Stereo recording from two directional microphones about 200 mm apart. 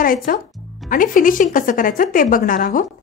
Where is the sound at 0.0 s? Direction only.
45° left (ahead or behind).